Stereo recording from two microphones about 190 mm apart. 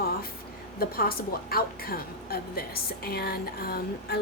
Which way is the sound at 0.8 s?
50° left (ahead or behind).